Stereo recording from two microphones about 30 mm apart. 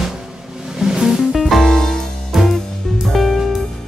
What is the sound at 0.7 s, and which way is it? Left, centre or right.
Music, centre.